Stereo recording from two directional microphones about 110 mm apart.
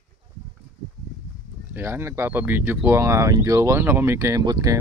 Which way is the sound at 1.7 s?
20° right (ahead or behind).